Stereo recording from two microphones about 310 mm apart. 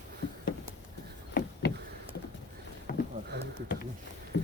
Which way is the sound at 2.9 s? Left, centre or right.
Left.